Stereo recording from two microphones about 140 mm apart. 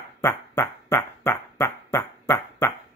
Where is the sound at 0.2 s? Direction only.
20° left (ahead or behind).